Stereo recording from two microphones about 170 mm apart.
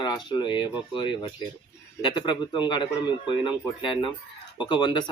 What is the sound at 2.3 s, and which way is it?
Speech, 25° left (ahead or behind).